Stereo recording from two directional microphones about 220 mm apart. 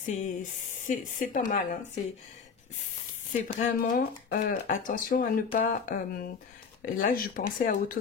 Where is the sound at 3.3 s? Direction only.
35° left (ahead or behind).